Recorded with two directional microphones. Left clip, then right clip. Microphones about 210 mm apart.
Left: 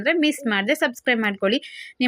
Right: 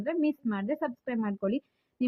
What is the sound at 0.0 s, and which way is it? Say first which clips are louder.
Speech: left 9 dB; 15° left (ahead or behind).